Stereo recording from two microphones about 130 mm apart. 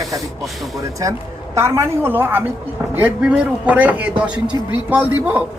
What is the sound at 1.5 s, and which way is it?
A man's voice, 20° right (ahead or behind).